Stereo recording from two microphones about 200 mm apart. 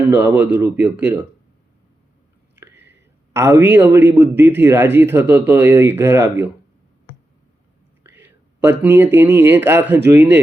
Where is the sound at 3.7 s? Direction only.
10° right (ahead or behind).